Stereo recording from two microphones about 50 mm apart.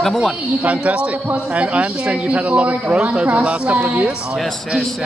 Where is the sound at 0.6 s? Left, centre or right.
Right.